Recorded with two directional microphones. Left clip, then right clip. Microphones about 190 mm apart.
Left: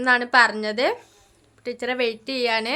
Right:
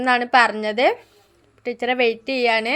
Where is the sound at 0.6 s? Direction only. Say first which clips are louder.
Right 4 dB; 10° right (ahead or behind).